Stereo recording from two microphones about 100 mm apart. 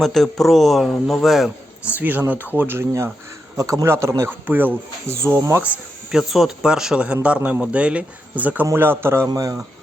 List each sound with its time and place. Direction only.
0.0 s speech: 5° left (ahead or behind)
2.0 s speech: 20° right (ahead or behind)
3.6 s a man's voice: 35° right (ahead or behind)
5.6 s speech: 10° right (ahead or behind)
9.3 s a man's voice: 35° right (ahead or behind)